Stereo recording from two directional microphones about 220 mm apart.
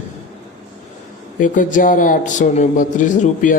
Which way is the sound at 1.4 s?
35° left (ahead or behind).